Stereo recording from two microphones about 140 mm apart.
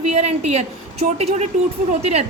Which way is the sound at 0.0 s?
50° right (ahead or behind).